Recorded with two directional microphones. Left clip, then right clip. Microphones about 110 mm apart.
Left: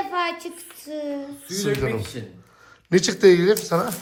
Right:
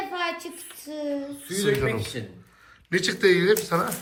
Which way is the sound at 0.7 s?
35° left (ahead or behind).